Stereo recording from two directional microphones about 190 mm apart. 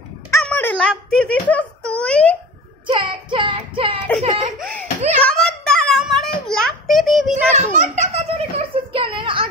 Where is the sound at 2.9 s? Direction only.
25° right (ahead or behind).